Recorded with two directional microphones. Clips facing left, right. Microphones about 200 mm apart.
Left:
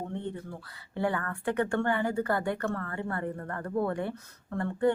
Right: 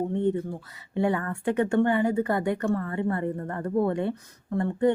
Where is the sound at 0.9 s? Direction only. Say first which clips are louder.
Right 5 dB; 20° right (ahead or behind).